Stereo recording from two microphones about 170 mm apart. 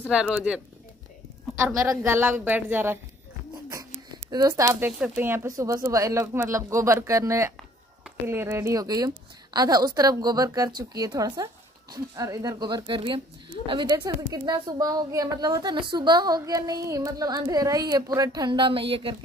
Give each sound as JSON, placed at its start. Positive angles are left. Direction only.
{"t": 0.1, "sound": "speech", "side_deg": -5}
{"t": 1.6, "sound": "speech", "side_deg": -15}
{"t": 4.3, "sound": "a woman's voice", "side_deg": -20}